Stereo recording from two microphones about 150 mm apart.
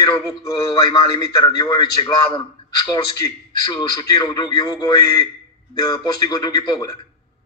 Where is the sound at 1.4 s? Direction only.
30° left (ahead or behind).